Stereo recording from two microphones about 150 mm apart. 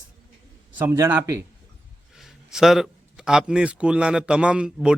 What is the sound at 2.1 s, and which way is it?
A man's voice, 5° right (ahead or behind).